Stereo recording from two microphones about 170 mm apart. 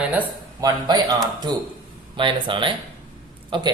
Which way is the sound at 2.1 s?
30° right (ahead or behind).